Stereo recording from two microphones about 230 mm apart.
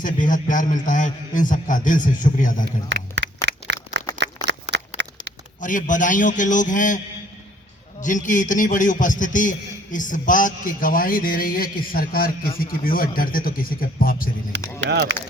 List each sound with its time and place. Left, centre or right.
0.0 s a man's voice: left
2.9 s a sound: right
5.5 s a man's voice: left
8.0 s a man's voice: left
14.8 s speech: right